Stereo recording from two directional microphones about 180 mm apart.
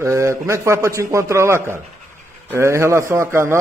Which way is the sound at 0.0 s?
15° right (ahead or behind).